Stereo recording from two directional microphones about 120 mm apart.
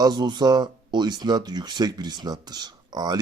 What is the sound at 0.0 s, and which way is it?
Speech, 40° right (ahead or behind).